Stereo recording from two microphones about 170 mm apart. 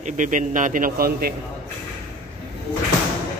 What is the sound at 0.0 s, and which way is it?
A man's voice, 50° right (ahead or behind).